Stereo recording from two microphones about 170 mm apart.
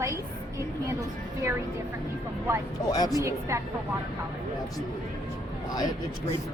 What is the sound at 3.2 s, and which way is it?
Speech, 15° right (ahead or behind).